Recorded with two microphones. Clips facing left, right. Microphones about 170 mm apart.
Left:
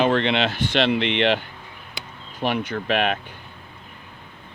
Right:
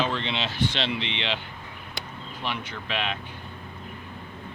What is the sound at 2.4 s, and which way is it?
Speech, 50° left (ahead or behind).